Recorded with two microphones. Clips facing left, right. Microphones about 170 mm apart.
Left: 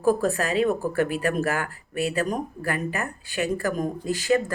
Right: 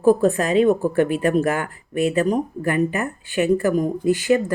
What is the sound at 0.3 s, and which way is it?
Speech, 35° left (ahead or behind).